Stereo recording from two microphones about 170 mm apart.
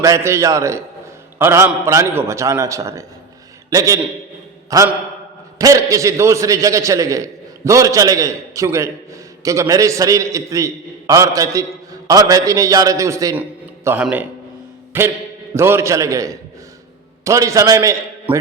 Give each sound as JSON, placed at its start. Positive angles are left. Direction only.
{"t": 0.0, "sound": "a man's voice", "side_deg": -15}